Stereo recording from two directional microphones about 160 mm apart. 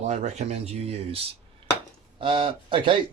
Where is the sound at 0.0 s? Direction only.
45° right (ahead or behind).